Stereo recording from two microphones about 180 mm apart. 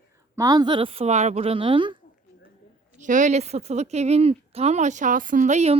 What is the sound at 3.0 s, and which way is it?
A woman's voice, 45° right (ahead or behind).